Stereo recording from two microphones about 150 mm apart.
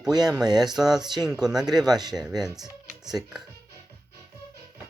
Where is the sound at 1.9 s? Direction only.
25° right (ahead or behind).